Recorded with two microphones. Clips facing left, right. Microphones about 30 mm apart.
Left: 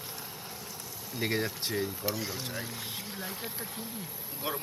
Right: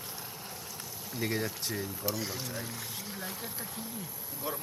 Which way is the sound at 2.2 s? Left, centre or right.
Centre.